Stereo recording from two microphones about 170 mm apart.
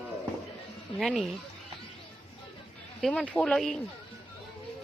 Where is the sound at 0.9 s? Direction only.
Centre (ahead or behind).